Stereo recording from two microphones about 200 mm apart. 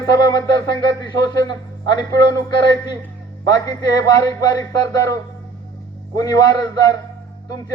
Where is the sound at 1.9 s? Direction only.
15° left (ahead or behind).